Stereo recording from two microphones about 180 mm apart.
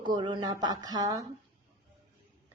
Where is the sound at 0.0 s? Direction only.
25° right (ahead or behind).